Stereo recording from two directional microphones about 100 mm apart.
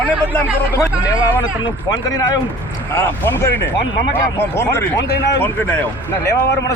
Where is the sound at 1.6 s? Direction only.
40° left (ahead or behind).